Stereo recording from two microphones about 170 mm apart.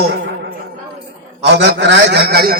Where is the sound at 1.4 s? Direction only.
90° right; by 2.6 s 65° right (ahead or behind).